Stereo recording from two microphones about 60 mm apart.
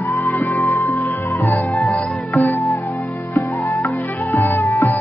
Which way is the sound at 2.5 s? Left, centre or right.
Left.